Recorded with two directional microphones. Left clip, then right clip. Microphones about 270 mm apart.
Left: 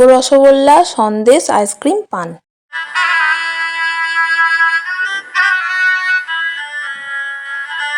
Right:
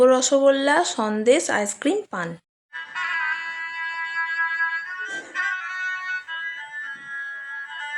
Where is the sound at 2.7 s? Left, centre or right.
Left.